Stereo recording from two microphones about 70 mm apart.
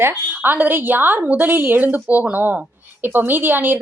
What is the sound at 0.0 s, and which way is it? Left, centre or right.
A woman's voice, right.